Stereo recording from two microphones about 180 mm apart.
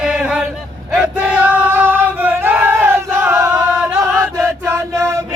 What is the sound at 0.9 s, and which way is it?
Singing, 5° right (ahead or behind).